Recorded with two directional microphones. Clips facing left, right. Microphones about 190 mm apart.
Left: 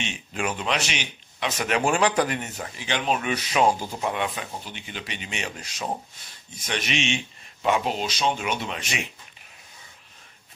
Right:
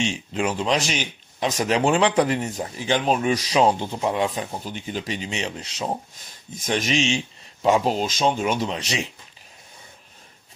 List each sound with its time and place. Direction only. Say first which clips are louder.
0.0 s speech: right 5 dB; 30° right (ahead or behind)
1.8 s speech: right 3 dB; 25° right (ahead or behind)
6.5 s speech: right 5 dB; 45° right (ahead or behind)